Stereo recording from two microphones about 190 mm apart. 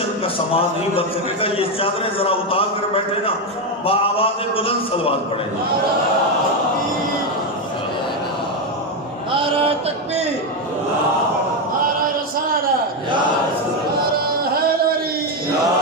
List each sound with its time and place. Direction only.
0.6 s a man's voice: 30° left (ahead or behind)